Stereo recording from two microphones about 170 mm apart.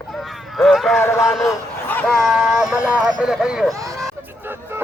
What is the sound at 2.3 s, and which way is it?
Speech, 5° right (ahead or behind).